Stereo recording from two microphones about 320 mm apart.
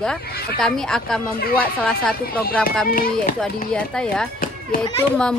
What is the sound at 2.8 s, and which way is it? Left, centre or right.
Speech, left.